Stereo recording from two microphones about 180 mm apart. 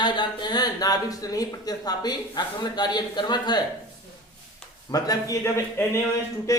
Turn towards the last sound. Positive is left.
turn(degrees=15)  # may be behind; listen again after turning